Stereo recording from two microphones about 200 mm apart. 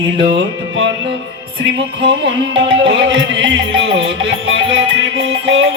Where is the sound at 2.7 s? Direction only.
70° right (ahead or behind).